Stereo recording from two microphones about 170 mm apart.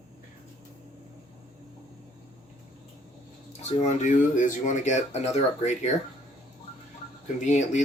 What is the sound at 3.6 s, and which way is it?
Speech, 45° left (ahead or behind).